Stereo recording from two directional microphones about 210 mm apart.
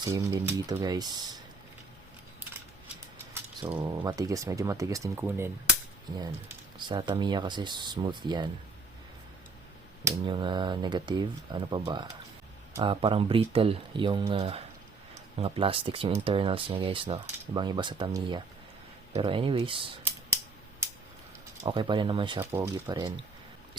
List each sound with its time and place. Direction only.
0.0 s speech: 15° right (ahead or behind)
3.6 s speech: 25° right (ahead or behind)
6.7 s speech: 20° right (ahead or behind)
10.0 s speech: 20° right (ahead or behind)
21.6 s speech: 20° right (ahead or behind)